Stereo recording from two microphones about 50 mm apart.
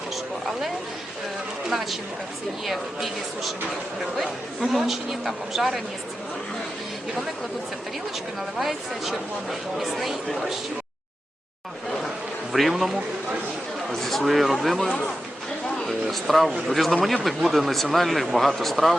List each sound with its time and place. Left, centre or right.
1.7 s speech: centre
4.6 s speech: centre
8.5 s speech: centre
12.5 s speech: centre
14.8 s speech: left
15.9 s speech: centre